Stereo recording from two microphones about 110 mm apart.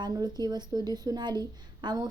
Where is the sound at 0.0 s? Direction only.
40° right (ahead or behind).